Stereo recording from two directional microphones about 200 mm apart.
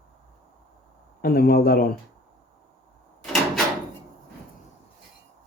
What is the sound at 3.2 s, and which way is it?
Door, centre (ahead or behind).